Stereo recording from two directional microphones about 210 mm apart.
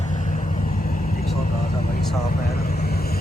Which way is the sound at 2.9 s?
45° left (ahead or behind).